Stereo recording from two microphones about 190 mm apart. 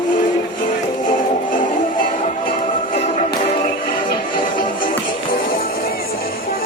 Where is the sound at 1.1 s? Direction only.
45° left (ahead or behind).